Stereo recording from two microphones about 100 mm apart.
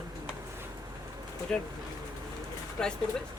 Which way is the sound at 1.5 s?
10° left (ahead or behind).